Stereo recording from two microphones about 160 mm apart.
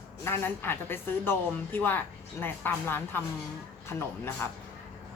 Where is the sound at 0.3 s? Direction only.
15° left (ahead or behind).